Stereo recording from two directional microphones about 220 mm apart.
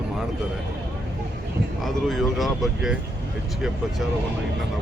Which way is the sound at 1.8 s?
Centre (ahead or behind).